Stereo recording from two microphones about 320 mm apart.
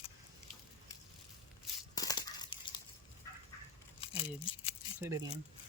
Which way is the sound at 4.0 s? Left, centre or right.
Centre.